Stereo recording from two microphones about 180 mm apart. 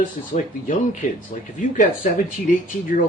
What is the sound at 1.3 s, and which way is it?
Speech, 45° left (ahead or behind).